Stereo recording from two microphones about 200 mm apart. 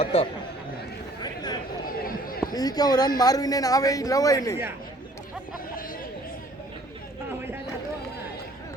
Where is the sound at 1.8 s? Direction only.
45° left (ahead or behind).